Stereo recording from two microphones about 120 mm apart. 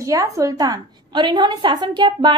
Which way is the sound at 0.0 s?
25° right (ahead or behind).